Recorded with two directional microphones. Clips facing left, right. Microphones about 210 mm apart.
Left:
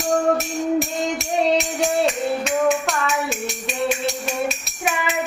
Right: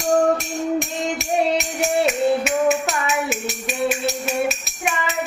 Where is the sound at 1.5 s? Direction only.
5° right (ahead or behind).